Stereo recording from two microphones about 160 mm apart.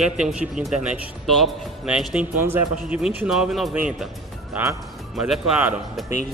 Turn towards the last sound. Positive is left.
turn(degrees=-5)  # may be behind; listen again after turning